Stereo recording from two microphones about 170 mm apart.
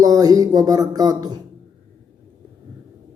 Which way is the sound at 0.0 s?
20° right (ahead or behind).